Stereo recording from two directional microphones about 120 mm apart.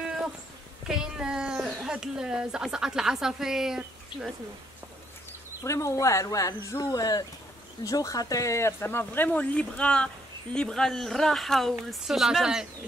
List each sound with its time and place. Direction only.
0.8 s speech: 5° right (ahead or behind)
5.6 s speech: 25° left (ahead or behind); by 12.6 s 5° right (ahead or behind)